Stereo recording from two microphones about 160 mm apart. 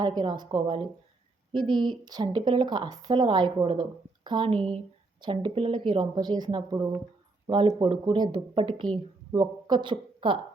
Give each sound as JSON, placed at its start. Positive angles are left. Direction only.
{"t": 0.0, "sound": "speech", "side_deg": -25}